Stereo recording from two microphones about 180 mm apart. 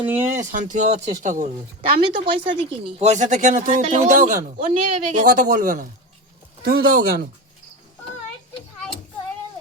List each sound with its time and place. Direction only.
0.3 s speech: 45° right (ahead or behind)
1.8 s speech: 30° right (ahead or behind)
2.8 s speech: 40° right (ahead or behind)
4.7 s speech: 30° right (ahead or behind)
5.2 s speech: 50° right (ahead or behind)